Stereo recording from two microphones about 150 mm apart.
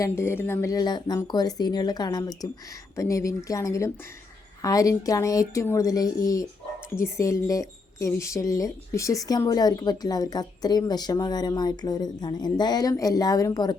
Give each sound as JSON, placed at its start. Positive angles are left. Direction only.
{"t": 0.0, "sound": "speech", "side_deg": 15}